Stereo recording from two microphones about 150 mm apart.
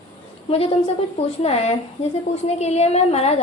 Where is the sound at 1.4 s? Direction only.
40° left (ahead or behind).